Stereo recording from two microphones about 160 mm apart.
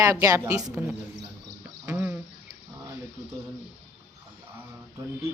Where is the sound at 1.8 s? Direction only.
10° right (ahead or behind).